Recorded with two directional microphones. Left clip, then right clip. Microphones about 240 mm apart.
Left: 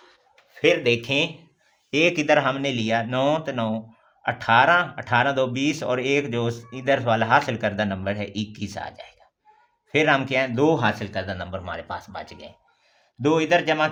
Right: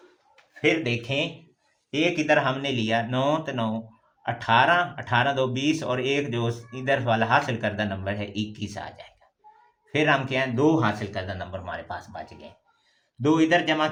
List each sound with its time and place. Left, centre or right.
0.6 s speech: left